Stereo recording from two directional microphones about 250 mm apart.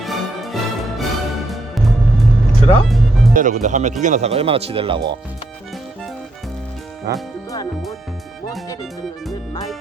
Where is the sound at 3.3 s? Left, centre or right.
Right.